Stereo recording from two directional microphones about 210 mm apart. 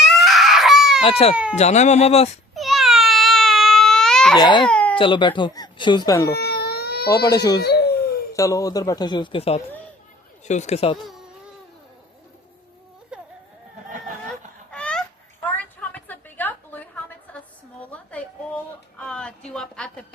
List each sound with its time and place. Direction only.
0.1 s a sound: centre (ahead or behind)
1.0 s speech: 30° left (ahead or behind)
2.6 s a sound: centre (ahead or behind)
4.4 s speech: 20° left (ahead or behind)
4.6 s baby cry: 5° left (ahead or behind)
4.9 s speech: 25° left (ahead or behind)
6.2 s baby cry: 50° left (ahead or behind)
7.1 s speech: 15° left (ahead or behind)
7.6 s a sound: 50° left (ahead or behind)
8.3 s speech: 15° left (ahead or behind)
14.7 s fowl: 5° left (ahead or behind)
15.5 s a sound: 5° left (ahead or behind)
18.9 s speech: 5° left (ahead or behind)